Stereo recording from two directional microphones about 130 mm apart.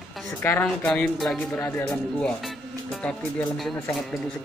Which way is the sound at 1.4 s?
15° left (ahead or behind).